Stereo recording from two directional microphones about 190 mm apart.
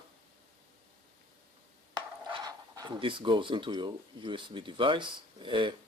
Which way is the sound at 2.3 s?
20° right (ahead or behind).